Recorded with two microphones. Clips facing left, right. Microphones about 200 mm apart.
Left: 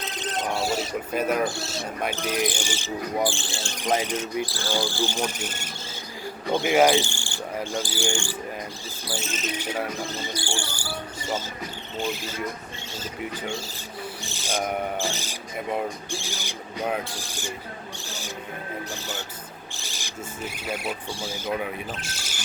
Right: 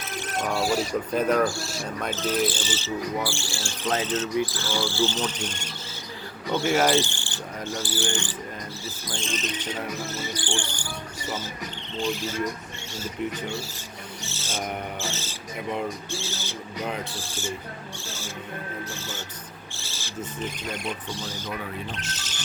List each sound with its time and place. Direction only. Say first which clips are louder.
0.0 s bird: even; 20° left (ahead or behind)
1.1 s speech: right 2 dB; 10° left (ahead or behind)
7.1 s cricket: left 2 dB; 15° left (ahead or behind)
7.8 s speech: even; 10° left (ahead or behind)
14.3 s speech: left 4 dB; 15° left (ahead or behind)
19.7 s speech: right 4 dB; 15° left (ahead or behind)